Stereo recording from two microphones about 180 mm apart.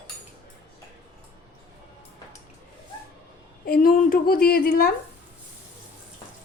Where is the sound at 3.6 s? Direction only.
50° left (ahead or behind).